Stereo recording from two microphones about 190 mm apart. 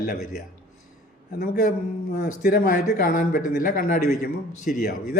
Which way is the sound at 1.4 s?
45° left (ahead or behind).